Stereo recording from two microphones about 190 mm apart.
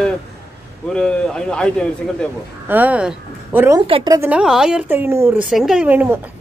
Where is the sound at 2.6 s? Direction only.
10° right (ahead or behind).